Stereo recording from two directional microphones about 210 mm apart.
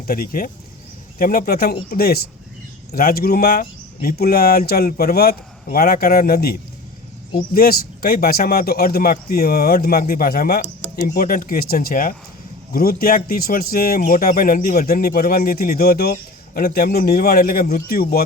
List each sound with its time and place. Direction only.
0.1 s speech: 40° left (ahead or behind)